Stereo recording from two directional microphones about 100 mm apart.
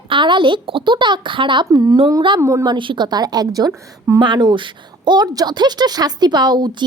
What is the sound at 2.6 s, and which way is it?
Speech, 55° right (ahead or behind).